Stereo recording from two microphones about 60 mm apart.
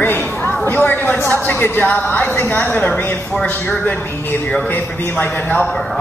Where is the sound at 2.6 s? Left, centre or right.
Left.